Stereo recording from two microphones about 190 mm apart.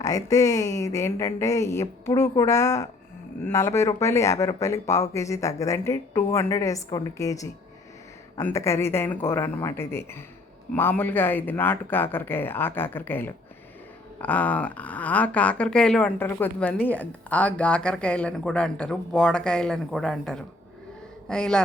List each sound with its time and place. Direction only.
0.0 s speech: 20° left (ahead or behind)